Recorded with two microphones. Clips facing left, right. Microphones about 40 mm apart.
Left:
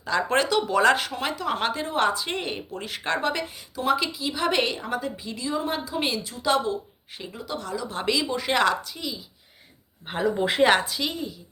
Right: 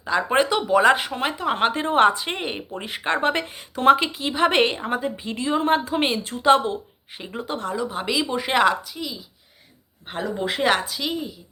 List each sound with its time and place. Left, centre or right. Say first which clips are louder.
0.0 s speech: right 3 dB; centre; by 7.9 s right
7.9 s a woman's voice: left 2 dB; centre